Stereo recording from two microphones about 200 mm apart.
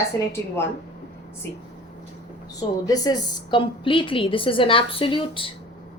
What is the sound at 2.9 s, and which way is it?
Speech, 20° left (ahead or behind).